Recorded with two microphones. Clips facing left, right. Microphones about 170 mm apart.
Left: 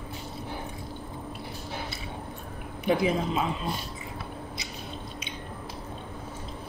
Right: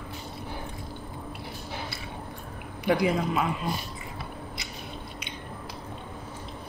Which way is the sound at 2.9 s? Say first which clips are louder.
Right 1 dB; 25° left (ahead or behind).